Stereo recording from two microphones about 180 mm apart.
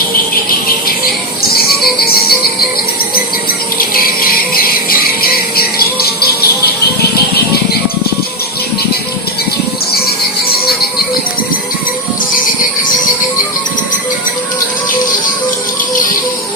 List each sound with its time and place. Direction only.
2.0 s music: 60° left (ahead or behind)
3.8 s music: 55° left (ahead or behind)